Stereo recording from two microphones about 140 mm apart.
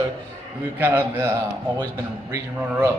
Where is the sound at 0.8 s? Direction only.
15° right (ahead or behind).